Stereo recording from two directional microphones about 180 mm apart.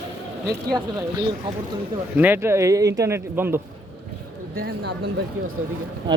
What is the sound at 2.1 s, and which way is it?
A man's voice, 10° right (ahead or behind).